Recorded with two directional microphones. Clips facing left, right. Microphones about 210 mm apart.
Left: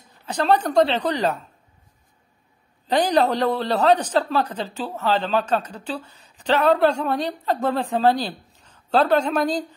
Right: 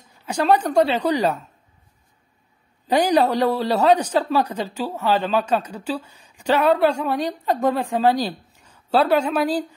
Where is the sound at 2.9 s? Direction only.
10° right (ahead or behind).